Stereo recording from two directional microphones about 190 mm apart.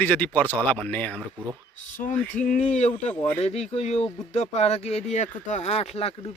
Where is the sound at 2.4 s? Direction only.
40° left (ahead or behind).